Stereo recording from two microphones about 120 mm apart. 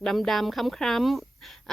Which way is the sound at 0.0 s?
Centre (ahead or behind).